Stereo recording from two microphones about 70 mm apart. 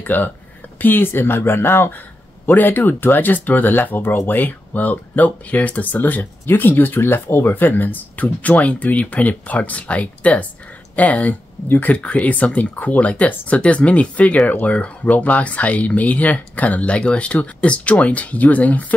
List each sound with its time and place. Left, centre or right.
0.0 s speech: left